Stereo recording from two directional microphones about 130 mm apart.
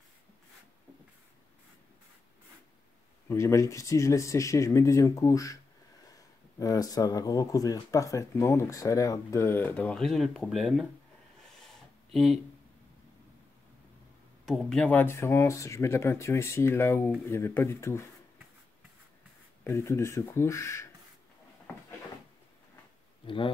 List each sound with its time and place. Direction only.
3.3 s speech: 20° left (ahead or behind); by 10.9 s centre (ahead or behind)
11.4 s a sound: centre (ahead or behind)
14.4 s speech: centre (ahead or behind)
15.0 s speech: 20° left (ahead or behind)
19.6 s speech: 20° left (ahead or behind)
23.2 s speech: 40° left (ahead or behind)